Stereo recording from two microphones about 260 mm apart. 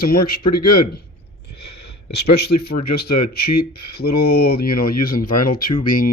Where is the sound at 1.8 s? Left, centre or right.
Left.